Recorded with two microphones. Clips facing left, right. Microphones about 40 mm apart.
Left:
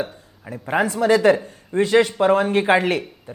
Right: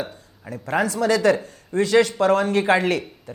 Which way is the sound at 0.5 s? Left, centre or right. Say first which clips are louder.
Left 1 dB; centre.